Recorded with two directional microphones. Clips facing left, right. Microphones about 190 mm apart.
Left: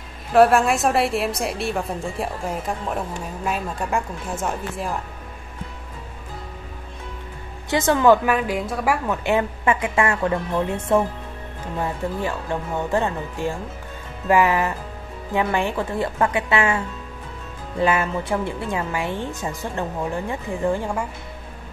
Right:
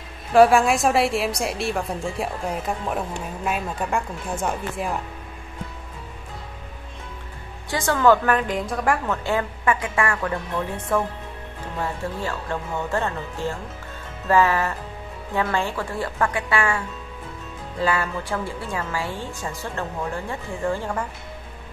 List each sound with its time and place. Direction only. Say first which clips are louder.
0.3 s a woman's voice: even; centre (ahead or behind)
7.7 s a woman's voice: left 2 dB; 20° left (ahead or behind)